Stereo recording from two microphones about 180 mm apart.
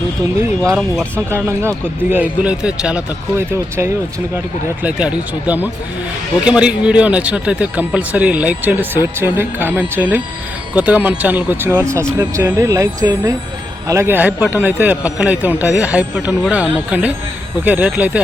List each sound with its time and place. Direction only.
0.8 s speech: centre (ahead or behind)
1.3 s a man's voice: 15° right (ahead or behind)